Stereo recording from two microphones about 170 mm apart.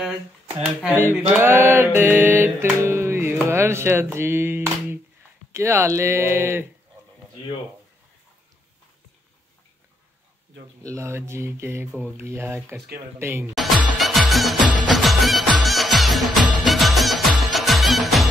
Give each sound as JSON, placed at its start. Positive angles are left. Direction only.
{"t": 0.0, "sound": "speech", "side_deg": -5}
{"t": 1.3, "sound": "mantra", "side_deg": -15}
{"t": 10.8, "sound": "mantra", "side_deg": -15}
{"t": 13.6, "sound": "music", "side_deg": 0}